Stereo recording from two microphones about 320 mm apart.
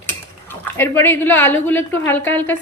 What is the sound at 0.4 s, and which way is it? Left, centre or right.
A woman's voice, centre.